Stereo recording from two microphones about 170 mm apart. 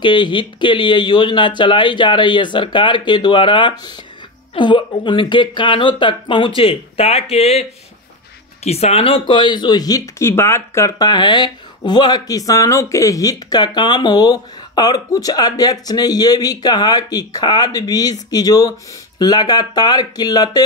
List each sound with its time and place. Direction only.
0.0 s speech: 30° left (ahead or behind)
8.6 s speech: 35° left (ahead or behind)